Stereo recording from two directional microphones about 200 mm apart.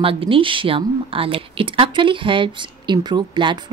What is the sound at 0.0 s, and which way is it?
A woman's voice, 25° right (ahead or behind).